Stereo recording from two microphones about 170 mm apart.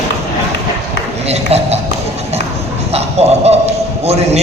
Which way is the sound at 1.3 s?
40° right (ahead or behind).